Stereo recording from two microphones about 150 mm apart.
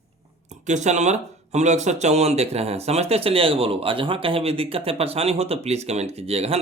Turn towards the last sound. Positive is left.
turn(degrees=-40)  # may be behind; listen again after turning